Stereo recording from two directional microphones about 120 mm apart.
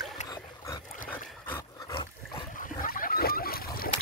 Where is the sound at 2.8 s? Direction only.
90° left.